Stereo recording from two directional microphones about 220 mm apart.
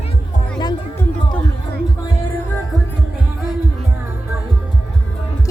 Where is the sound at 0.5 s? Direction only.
20° left (ahead or behind).